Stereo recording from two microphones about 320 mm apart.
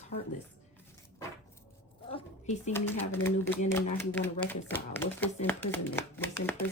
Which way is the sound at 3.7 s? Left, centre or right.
Centre.